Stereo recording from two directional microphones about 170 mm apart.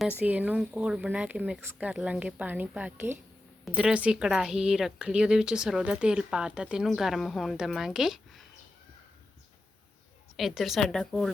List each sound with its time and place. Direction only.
0.3 s a woman's voice: 10° right (ahead or behind)
10.3 s a woman's voice: centre (ahead or behind)